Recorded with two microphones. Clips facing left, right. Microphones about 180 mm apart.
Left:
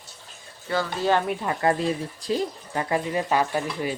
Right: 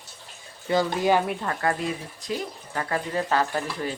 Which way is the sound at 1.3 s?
5° left (ahead or behind).